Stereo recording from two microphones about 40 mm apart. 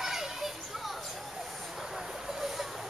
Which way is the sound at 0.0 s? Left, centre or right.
Centre.